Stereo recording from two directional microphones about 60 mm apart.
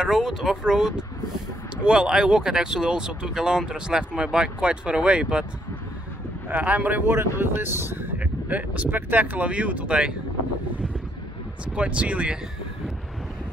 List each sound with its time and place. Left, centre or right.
0.0 s speech: centre
6.6 s speech: right
7.1 s speech: right
8.2 s speech: right
11.6 s speech: centre